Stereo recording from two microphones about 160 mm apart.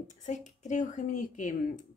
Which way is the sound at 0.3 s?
50° left (ahead or behind).